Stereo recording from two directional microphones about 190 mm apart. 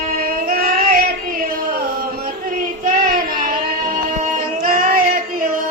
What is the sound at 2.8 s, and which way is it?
Child singing, 45° right (ahead or behind).